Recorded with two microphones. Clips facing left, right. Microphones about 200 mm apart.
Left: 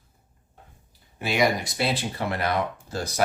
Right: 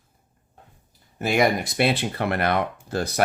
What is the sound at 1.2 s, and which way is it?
Speech, 50° right (ahead or behind).